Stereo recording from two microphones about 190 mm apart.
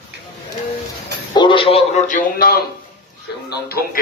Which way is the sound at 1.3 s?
25° left (ahead or behind).